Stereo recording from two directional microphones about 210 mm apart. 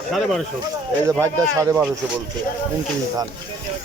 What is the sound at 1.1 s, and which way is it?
Speech, 15° right (ahead or behind).